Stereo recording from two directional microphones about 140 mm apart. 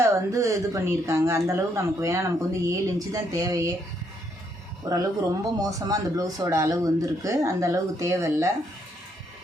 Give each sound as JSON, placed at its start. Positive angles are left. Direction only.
{"t": 0.0, "sound": "speech", "side_deg": -20}
{"t": 4.9, "sound": "speech", "side_deg": -25}